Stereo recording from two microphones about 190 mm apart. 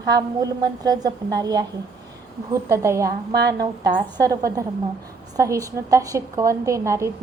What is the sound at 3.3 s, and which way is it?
Speech, 60° right (ahead or behind).